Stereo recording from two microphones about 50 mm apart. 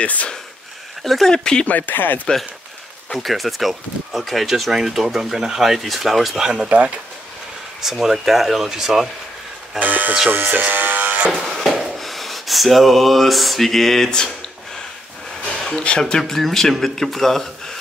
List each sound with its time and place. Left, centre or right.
0.0 s speech: left
1.0 s speech: centre
1.3 s speech: centre
1.7 s speech: left
3.1 s speech: centre
7.8 s speech: centre
9.8 s speech: right
10.3 s electric shaver: right
11.4 s a sound: centre
15.6 s speech: centre
16.0 s speech: centre